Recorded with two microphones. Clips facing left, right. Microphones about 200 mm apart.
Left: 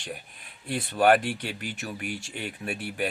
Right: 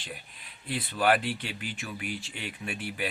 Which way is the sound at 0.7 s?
50° left (ahead or behind).